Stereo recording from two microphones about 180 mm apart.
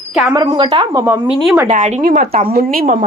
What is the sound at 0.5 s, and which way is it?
Speech, 30° right (ahead or behind).